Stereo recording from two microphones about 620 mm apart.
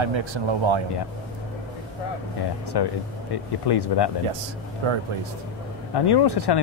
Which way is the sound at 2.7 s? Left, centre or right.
Left.